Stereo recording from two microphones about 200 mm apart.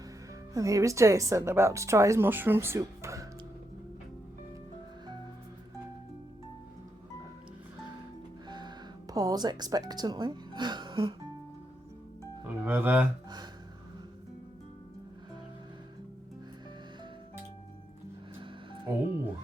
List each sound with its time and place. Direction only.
0.5 s a woman's voice: 15° right (ahead or behind)
8.4 s speech: 20° right (ahead or behind)
12.5 s speech: 10° right (ahead or behind)
18.3 s music: 25° right (ahead or behind)